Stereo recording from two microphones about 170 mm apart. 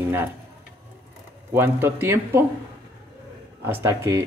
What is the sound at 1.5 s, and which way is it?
Speech, 15° right (ahead or behind).